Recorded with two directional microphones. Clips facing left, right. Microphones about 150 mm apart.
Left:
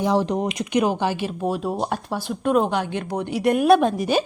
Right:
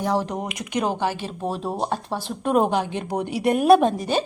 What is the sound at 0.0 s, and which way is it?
A woman's voice, 15° left (ahead or behind).